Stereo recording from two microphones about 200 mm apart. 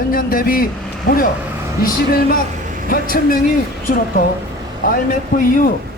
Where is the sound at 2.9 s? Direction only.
45° left (ahead or behind).